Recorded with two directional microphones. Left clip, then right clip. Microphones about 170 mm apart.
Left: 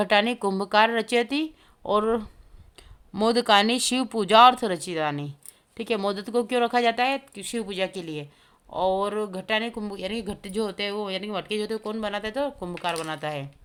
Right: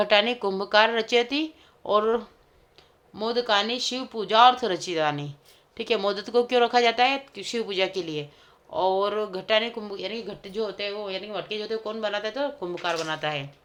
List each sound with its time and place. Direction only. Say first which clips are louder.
0.0 s speech: right 1 dB; 40° left (ahead or behind)
3.1 s speech: left 4 dB; 50° left (ahead or behind)